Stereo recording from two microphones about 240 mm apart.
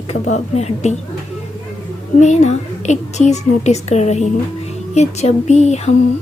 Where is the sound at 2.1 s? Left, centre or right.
Left.